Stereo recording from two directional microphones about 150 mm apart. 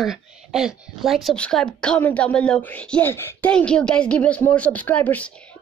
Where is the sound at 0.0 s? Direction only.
5° right (ahead or behind).